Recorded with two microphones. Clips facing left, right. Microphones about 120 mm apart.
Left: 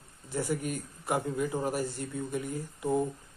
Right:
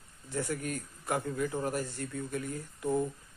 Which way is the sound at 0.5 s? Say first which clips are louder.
Left 3 dB; 10° left (ahead or behind).